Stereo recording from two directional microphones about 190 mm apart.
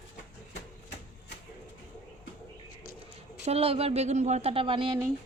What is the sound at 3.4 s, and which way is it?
Speech, 30° right (ahead or behind).